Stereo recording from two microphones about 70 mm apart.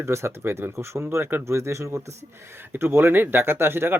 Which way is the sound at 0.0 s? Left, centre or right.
Right.